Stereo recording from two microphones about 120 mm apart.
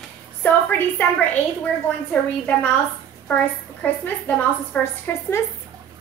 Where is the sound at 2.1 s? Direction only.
10° left (ahead or behind).